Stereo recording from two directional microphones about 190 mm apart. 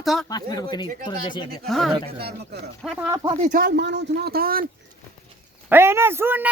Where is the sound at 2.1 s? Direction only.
60° right (ahead or behind).